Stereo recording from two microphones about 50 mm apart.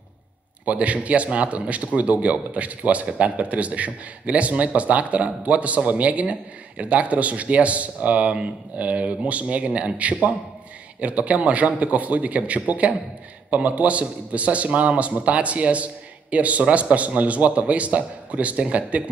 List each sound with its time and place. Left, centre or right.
0.7 s speech: right